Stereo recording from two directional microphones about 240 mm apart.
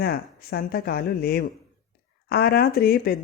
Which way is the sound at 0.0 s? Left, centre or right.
Left.